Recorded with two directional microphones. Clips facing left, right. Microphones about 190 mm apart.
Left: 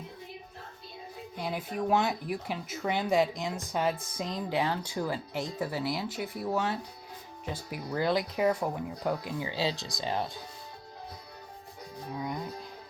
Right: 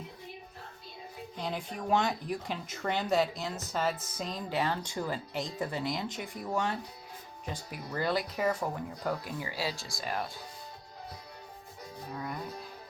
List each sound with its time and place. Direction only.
1.4 s speech: 10° left (ahead or behind)
9.5 s speech: 20° left (ahead or behind)
12.1 s music: 15° left (ahead or behind)